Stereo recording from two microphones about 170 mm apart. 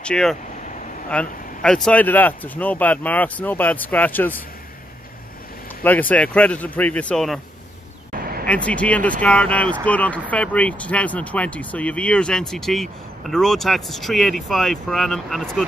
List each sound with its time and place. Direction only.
0.0 s speech: 5° left (ahead or behind)
5.9 s speech: 10° left (ahead or behind)
8.1 s vehicle: 60° right (ahead or behind)
8.5 s speech: 10° left (ahead or behind)